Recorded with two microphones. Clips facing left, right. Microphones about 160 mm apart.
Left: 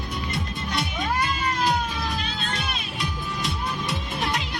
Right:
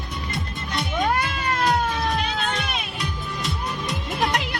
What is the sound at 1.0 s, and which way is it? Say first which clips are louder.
Cat: right 2 dB; 70° right (ahead or behind).